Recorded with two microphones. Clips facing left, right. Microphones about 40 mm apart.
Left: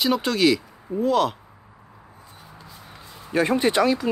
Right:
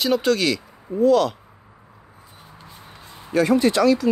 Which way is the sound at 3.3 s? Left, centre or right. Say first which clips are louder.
Right 2 dB; left.